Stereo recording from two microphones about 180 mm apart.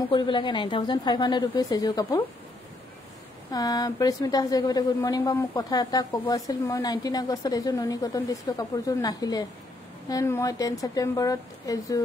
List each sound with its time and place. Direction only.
0.1 s a woman's voice: 25° left (ahead or behind)
3.5 s a woman's voice: 20° left (ahead or behind)